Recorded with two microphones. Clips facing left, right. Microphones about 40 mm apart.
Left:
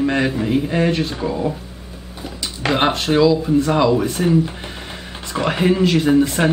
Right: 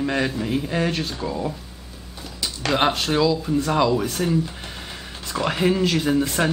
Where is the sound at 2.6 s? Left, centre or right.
Centre.